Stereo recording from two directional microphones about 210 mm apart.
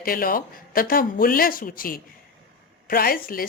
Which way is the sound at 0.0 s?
45° left (ahead or behind).